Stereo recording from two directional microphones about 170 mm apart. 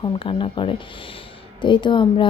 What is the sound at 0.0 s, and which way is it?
A woman's voice, 30° left (ahead or behind).